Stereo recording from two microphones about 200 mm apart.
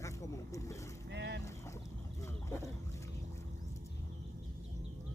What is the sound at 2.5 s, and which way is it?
Speech, 15° left (ahead or behind).